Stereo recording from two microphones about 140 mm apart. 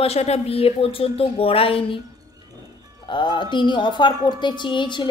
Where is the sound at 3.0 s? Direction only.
35° left (ahead or behind).